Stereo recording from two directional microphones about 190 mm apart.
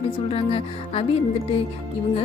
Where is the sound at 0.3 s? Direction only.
30° left (ahead or behind).